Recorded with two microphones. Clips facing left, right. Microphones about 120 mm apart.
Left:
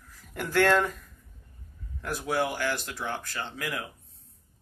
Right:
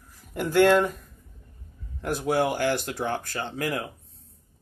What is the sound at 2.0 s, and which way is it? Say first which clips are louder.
Speech: right 4 dB; 25° right (ahead or behind).